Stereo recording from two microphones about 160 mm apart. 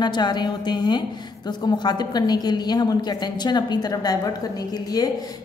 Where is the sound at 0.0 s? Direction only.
25° left (ahead or behind).